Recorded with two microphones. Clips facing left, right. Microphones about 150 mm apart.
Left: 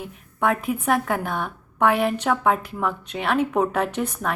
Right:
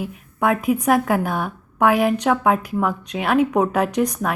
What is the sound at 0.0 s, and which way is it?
A woman's voice, 5° right (ahead or behind).